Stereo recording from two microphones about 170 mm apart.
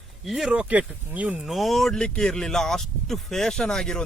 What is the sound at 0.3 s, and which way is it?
Speech, centre (ahead or behind).